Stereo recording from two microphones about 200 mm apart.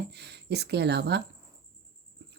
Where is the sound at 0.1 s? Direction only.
55° right (ahead or behind).